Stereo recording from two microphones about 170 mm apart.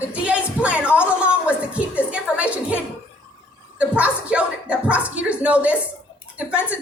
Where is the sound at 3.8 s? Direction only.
10° right (ahead or behind).